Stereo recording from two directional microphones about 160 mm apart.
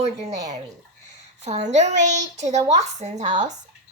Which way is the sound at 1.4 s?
45° right (ahead or behind).